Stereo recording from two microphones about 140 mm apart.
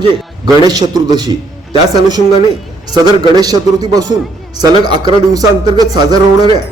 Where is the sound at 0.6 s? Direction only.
30° right (ahead or behind).